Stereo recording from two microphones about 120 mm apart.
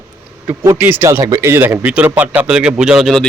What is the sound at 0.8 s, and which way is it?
Speech, 15° right (ahead or behind).